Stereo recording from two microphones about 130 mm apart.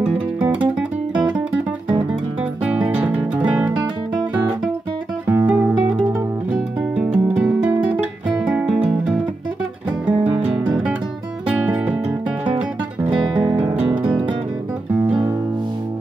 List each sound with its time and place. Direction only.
0.4 s music: 10° right (ahead or behind)
2.6 s music: 10° right (ahead or behind)
5.2 s music: 15° right (ahead or behind)
6.5 s guitar: 10° right (ahead or behind)
8.6 s music: 50° right (ahead or behind)
10.0 s music: 10° right (ahead or behind)
13.6 s music: 15° right (ahead or behind)